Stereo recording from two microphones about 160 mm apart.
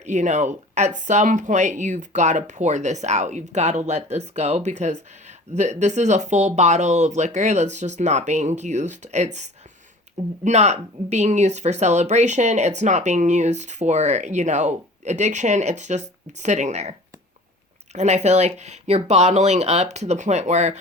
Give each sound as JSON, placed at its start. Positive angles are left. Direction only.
{"t": 0.0, "sound": "speech", "side_deg": -45}
{"t": 17.9, "sound": "speech", "side_deg": -45}